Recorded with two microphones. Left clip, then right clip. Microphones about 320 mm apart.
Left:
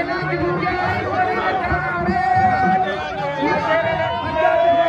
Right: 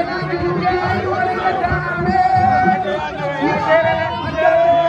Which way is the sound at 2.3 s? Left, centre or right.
Left.